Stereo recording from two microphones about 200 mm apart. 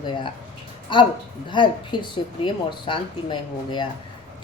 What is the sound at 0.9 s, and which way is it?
Speech, 25° left (ahead or behind).